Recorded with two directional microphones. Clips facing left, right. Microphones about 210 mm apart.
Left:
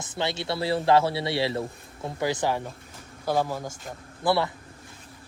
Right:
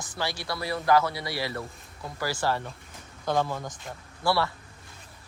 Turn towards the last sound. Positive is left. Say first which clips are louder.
# left 2 dB
turn(degrees=20)  # may be behind; listen again after turning